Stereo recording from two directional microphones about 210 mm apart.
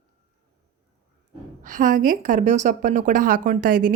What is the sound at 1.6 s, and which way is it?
A woman's voice, 40° right (ahead or behind).